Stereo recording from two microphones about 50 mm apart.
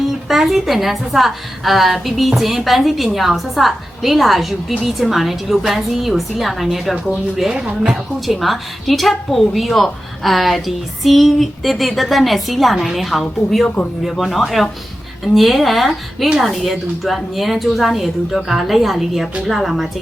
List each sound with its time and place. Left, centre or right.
0.3 s a woman's voice: centre
7.6 s a woman's voice: right
8.3 s a woman's voice: centre